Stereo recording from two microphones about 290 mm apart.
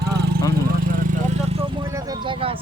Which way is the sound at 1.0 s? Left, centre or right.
Right.